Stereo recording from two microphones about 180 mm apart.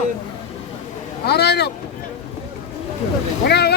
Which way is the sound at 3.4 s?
65° left (ahead or behind).